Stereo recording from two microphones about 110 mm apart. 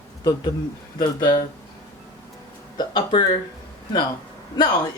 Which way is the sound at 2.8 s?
40° left (ahead or behind).